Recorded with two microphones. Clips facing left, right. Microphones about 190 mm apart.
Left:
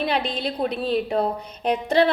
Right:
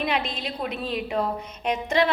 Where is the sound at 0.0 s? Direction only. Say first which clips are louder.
Left 3 dB; 35° left (ahead or behind).